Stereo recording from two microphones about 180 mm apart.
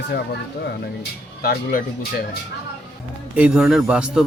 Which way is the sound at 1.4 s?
55° left (ahead or behind).